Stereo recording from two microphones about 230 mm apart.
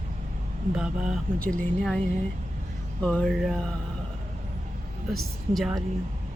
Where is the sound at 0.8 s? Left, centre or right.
Centre.